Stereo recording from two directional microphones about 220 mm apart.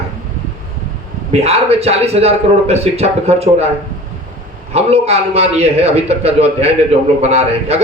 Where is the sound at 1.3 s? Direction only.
30° right (ahead or behind).